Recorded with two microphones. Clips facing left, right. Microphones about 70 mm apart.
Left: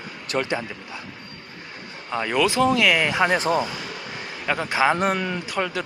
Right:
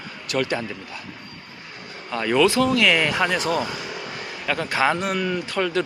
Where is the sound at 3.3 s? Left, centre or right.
Left.